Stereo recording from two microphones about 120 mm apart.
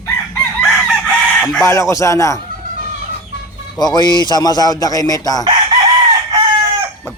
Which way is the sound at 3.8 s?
35° left (ahead or behind).